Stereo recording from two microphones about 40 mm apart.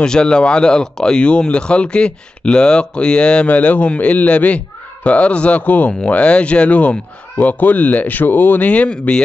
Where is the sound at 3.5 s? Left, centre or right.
Left.